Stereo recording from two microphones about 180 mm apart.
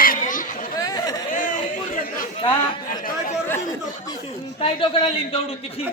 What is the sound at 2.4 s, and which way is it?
Speech, 25° left (ahead or behind).